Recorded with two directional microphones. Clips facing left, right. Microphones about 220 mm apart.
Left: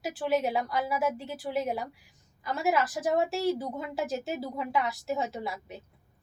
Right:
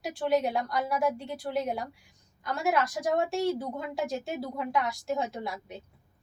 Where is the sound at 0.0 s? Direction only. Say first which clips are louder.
Right 1 dB; 5° left (ahead or behind).